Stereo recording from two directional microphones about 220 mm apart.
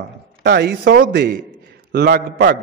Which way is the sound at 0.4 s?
50° right (ahead or behind).